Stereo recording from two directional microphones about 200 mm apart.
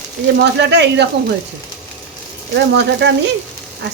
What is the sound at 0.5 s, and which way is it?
Speech, 60° right (ahead or behind).